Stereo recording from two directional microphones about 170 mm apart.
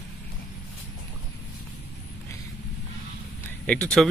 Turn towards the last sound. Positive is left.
turn(degrees=5)  # may be behind; listen again after turning